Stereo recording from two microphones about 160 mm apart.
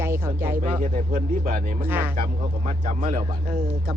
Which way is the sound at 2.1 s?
65° right (ahead or behind).